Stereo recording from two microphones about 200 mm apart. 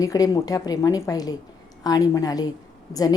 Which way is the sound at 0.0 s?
15° left (ahead or behind).